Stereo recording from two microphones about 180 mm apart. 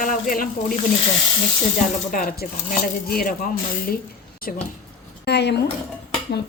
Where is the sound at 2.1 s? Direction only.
50° left (ahead or behind).